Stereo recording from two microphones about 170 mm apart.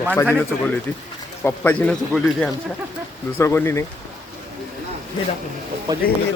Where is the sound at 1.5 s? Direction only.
10° left (ahead or behind).